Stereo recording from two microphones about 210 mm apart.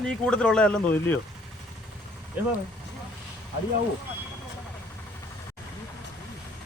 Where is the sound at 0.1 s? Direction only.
5° left (ahead or behind).